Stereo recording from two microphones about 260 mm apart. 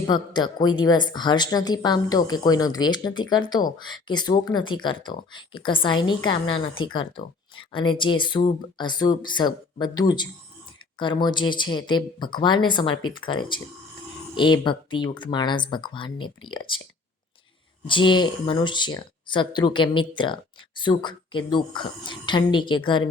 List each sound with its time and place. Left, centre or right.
0.1 s speech: centre
17.8 s speech: centre